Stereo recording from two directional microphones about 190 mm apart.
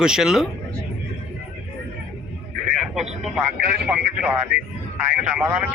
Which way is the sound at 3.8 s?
5° right (ahead or behind).